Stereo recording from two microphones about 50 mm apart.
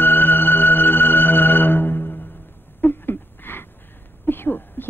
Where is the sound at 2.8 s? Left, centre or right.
Left.